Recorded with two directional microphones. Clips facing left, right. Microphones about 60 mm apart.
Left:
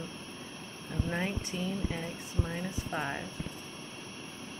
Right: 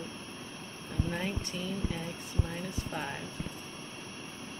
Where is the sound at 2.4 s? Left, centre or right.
Left.